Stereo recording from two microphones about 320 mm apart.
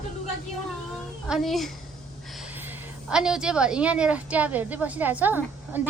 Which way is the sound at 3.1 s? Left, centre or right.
Centre.